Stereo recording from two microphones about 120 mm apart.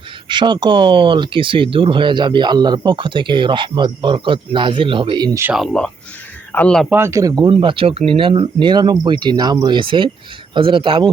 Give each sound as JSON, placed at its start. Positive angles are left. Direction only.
{"t": 0.3, "sound": "speech", "side_deg": -40}
{"t": 5.5, "sound": "speech", "side_deg": 5}
{"t": 6.9, "sound": "speech", "side_deg": -25}
{"t": 7.5, "sound": "speech", "side_deg": -45}